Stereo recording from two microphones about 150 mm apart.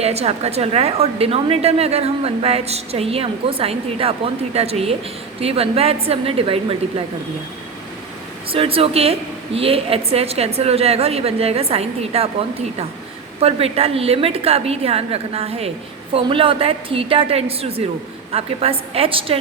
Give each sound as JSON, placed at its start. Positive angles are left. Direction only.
{"t": 0.0, "sound": "a woman's voice", "side_deg": -45}
{"t": 8.4, "sound": "a woman's voice", "side_deg": -40}
{"t": 13.4, "sound": "a woman's voice", "side_deg": -40}